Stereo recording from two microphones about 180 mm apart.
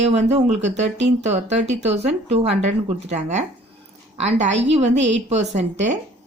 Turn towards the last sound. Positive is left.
turn(degrees=-40)  # may be behind; listen again after turning